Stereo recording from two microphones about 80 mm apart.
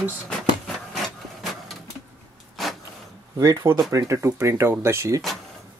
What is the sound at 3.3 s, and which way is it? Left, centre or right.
Speech, right.